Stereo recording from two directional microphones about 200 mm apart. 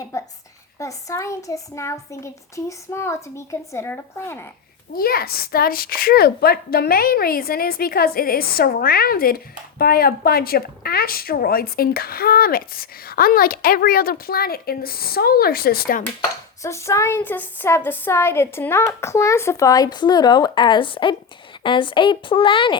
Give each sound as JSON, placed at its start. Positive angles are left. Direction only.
{"t": 0.0, "sound": "a woman's voice", "side_deg": 15}
{"t": 4.9, "sound": "a woman's voice", "side_deg": 50}
{"t": 16.6, "sound": "a woman's voice", "side_deg": 15}